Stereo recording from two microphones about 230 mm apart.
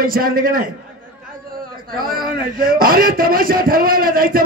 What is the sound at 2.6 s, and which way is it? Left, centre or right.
A man's voice, right.